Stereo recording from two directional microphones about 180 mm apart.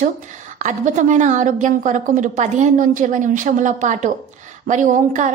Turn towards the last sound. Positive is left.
turn(degrees=-45)  # may be behind; listen again after turning